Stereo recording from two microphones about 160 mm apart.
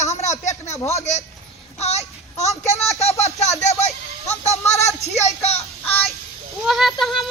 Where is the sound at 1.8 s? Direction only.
40° left (ahead or behind).